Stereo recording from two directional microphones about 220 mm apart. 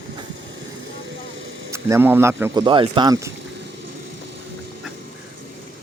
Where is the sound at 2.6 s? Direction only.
20° right (ahead or behind).